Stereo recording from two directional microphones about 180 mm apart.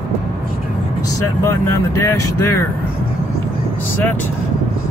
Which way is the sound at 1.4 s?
15° left (ahead or behind).